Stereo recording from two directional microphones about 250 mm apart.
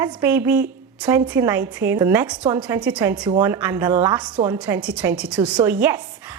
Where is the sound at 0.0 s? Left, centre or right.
Centre.